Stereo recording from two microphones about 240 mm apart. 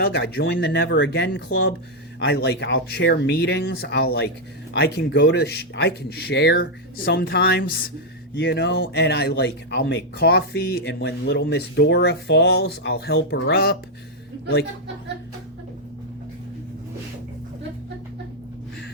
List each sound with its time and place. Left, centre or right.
0.0 s speech: left